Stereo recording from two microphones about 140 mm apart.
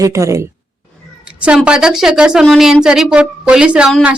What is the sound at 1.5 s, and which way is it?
A woman's voice, 5° right (ahead or behind).